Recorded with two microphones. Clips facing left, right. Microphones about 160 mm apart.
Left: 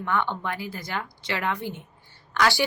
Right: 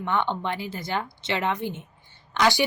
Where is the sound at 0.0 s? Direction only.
20° right (ahead or behind).